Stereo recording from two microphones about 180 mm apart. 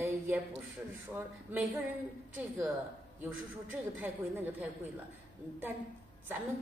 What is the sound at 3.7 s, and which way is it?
Speech, 10° right (ahead or behind).